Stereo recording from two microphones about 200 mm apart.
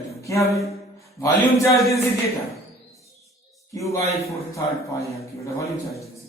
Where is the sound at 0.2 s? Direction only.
15° left (ahead or behind).